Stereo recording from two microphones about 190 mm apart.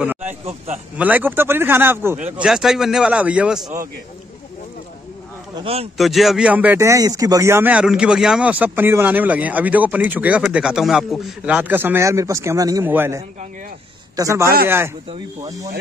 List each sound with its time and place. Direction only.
0.0 s a sound: 10° right (ahead or behind)
0.3 s speech: 35° right (ahead or behind)
0.9 s a man's voice: 10° right (ahead or behind)
5.6 s speech: 30° right (ahead or behind)
5.9 s speech: centre (ahead or behind); by 15.7 s 20° right (ahead or behind)